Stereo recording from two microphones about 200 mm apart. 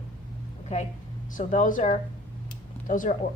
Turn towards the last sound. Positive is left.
turn(degrees=40)  # may be behind; listen again after turning